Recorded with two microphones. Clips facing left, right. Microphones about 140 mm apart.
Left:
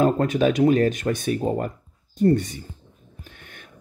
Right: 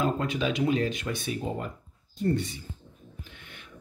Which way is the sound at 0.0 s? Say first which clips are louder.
Left 8 dB; 50° left (ahead or behind).